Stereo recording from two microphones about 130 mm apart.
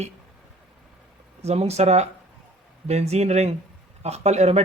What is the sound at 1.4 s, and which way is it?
Speech, 55° right (ahead or behind).